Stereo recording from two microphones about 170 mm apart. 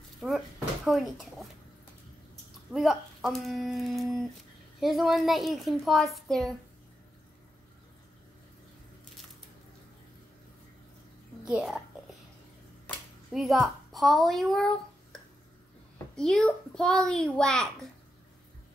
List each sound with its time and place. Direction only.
0.2 s a child's voice: 10° left (ahead or behind)
2.7 s a child's voice: centre (ahead or behind)
11.4 s a sound: 5° right (ahead or behind)
13.3 s a child's voice: centre (ahead or behind)
16.2 s a child's voice: 5° left (ahead or behind)